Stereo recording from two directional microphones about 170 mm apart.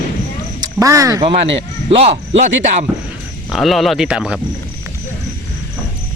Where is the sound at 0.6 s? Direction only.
20° right (ahead or behind).